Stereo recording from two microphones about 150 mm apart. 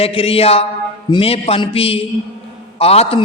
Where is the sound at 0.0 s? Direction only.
40° left (ahead or behind).